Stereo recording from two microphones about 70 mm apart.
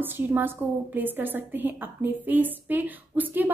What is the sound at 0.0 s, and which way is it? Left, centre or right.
A woman's voice, right.